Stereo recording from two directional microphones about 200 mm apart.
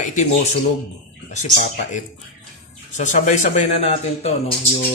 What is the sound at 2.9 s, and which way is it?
Speech, 40° left (ahead or behind).